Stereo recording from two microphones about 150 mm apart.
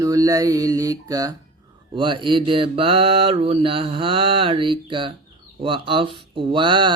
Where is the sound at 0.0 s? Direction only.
25° right (ahead or behind).